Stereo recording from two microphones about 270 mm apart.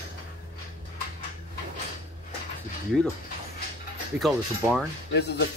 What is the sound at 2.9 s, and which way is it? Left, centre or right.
Speech, centre.